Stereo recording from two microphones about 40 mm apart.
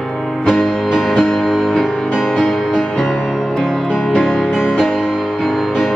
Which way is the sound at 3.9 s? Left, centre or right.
Left.